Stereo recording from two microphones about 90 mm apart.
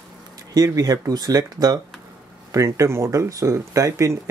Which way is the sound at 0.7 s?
40° right (ahead or behind).